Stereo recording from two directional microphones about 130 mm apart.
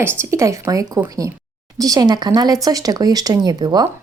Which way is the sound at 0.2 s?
20° right (ahead or behind).